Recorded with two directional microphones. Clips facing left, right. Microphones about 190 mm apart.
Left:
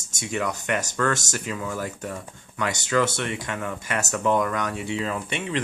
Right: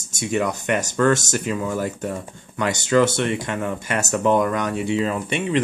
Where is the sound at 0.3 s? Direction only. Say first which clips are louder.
Right 5 dB; 20° right (ahead or behind).